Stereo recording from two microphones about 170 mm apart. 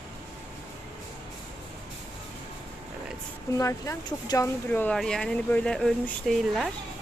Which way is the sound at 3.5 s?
20° left (ahead or behind).